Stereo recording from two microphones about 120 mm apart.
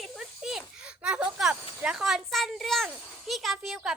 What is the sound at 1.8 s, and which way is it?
A child's voice, 5° right (ahead or behind).